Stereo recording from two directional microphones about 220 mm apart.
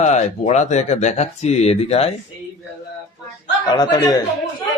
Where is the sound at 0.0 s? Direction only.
30° left (ahead or behind).